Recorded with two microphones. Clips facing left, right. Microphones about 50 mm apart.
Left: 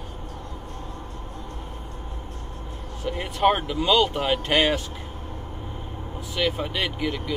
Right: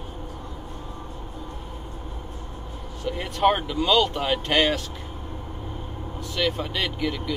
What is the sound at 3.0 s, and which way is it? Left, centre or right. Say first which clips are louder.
Speech: even; centre.